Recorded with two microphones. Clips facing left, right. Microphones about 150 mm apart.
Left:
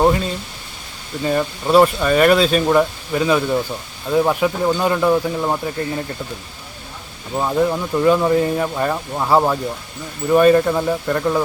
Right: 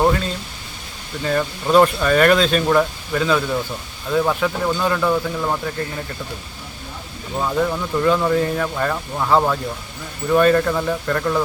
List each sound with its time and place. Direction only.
1.2 s speech: 15° left (ahead or behind)
7.3 s speech: 20° left (ahead or behind)